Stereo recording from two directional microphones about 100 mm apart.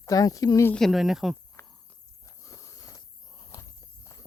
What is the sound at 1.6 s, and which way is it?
Cricket, 30° left (ahead or behind).